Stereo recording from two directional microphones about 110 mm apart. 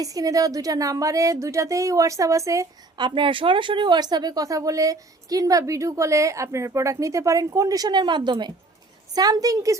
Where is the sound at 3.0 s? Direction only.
50° right (ahead or behind).